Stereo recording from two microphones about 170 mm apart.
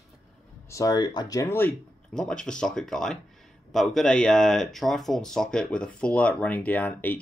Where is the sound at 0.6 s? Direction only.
20° left (ahead or behind).